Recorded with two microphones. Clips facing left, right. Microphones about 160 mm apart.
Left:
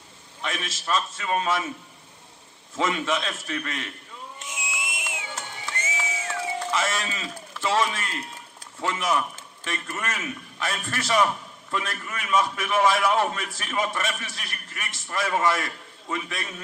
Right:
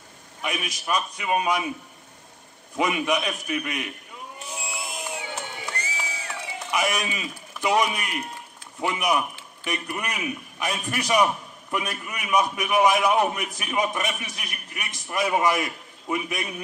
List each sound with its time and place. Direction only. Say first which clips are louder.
0.4 s a man's voice: right 2 dB; 15° right (ahead or behind)
2.7 s a man's voice: right 2 dB; 15° right (ahead or behind)
4.5 s a sound: right 1 dB; 35° right (ahead or behind)
5.7 s mechanisms: left 1 dB; 35° right (ahead or behind)
6.7 s a man's voice: right 5 dB; 15° right (ahead or behind)